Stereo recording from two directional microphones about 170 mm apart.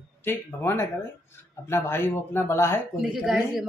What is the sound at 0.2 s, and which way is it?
Speech, 10° left (ahead or behind).